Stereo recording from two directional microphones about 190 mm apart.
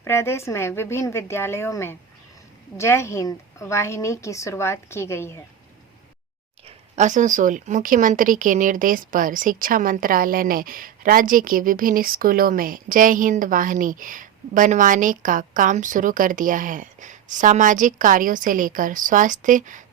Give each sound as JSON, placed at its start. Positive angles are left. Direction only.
{"t": 0.0, "sound": "a woman's voice", "side_deg": 15}
{"t": 6.7, "sound": "speech", "side_deg": -35}